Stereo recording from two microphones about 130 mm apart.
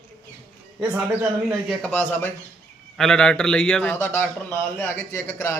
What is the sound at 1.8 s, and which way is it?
A man's voice, 10° left (ahead or behind).